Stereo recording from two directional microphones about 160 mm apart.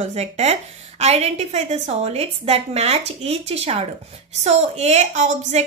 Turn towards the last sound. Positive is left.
turn(degrees=-45)  # may be behind; listen again after turning